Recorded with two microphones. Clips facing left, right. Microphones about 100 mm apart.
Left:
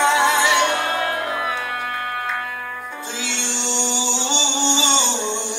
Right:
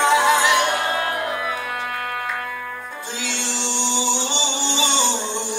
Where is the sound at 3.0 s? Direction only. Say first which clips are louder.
Right 1 dB; 25° left (ahead or behind).